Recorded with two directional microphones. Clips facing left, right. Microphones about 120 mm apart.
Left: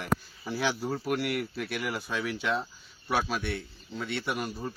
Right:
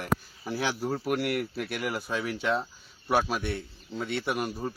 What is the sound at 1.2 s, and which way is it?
Speech, 45° right (ahead or behind).